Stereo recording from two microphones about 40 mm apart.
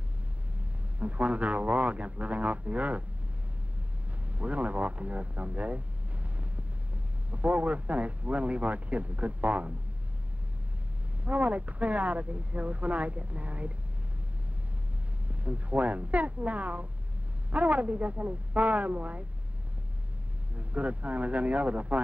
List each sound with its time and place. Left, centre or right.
0.9 s speech: right
4.3 s speech: right
7.2 s speech: right
11.2 s speech: right
15.2 s speech: right
20.5 s speech: right